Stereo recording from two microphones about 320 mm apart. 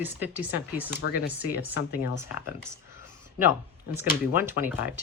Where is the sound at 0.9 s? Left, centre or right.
Left.